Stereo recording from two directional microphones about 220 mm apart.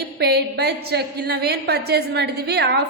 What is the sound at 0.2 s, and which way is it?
A woman's voice, 45° right (ahead or behind).